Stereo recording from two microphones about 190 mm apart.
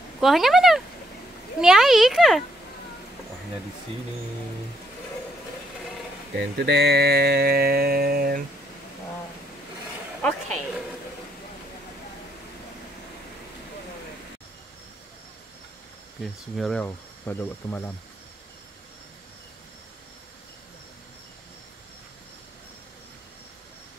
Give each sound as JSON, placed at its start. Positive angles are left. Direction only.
{"t": 0.2, "sound": "a child's voice", "side_deg": 0}
{"t": 6.3, "sound": "a sound", "side_deg": -60}
{"t": 10.2, "sound": "a woman's voice", "side_deg": 0}
{"t": 16.2, "sound": "a child's voice", "side_deg": 0}
{"t": 16.8, "sound": "speech", "side_deg": 10}